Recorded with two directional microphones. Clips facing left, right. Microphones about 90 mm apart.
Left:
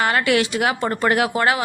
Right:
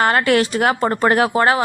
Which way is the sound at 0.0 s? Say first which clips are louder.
Right 3 dB; 45° right (ahead or behind).